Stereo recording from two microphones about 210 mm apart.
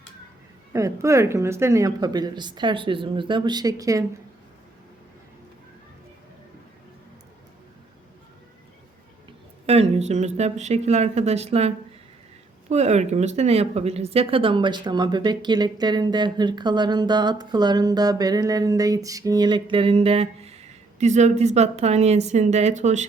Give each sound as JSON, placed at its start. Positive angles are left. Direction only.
{"t": 0.7, "sound": "speech", "side_deg": -15}
{"t": 9.6, "sound": "speech", "side_deg": -30}
{"t": 12.7, "sound": "speech", "side_deg": -30}